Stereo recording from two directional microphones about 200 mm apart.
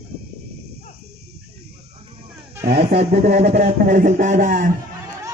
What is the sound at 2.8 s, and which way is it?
A man's voice, 30° right (ahead or behind).